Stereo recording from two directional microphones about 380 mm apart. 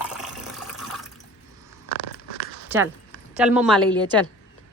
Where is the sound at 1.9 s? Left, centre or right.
Left.